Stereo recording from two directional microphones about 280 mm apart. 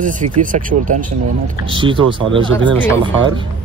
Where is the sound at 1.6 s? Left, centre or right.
Centre.